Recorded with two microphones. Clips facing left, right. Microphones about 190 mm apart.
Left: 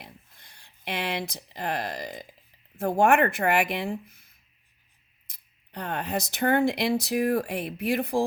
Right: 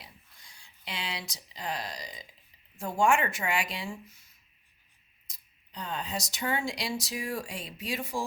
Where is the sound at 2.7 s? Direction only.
60° left (ahead or behind).